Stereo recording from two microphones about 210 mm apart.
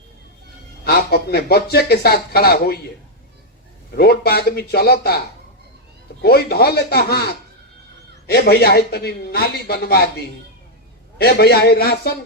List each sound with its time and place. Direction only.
0.9 s speech: 50° left (ahead or behind)
3.9 s speech: 50° left (ahead or behind)
6.2 s speech: 50° left (ahead or behind)
11.2 s speech: 50° left (ahead or behind)